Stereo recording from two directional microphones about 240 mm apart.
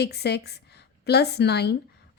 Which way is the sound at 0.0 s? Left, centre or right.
Left.